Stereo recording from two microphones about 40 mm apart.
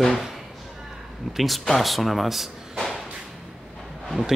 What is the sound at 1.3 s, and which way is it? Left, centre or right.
Speech, centre.